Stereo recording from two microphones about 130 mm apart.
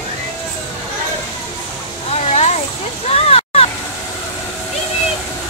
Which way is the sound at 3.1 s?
50° left (ahead or behind).